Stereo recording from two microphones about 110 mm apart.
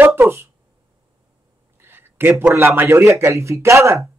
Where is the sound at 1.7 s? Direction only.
20° right (ahead or behind).